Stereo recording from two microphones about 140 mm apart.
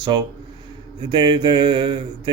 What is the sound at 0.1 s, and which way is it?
Speech, 30° right (ahead or behind).